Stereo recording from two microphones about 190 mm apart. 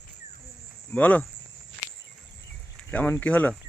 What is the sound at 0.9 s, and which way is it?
Speech, 10° left (ahead or behind).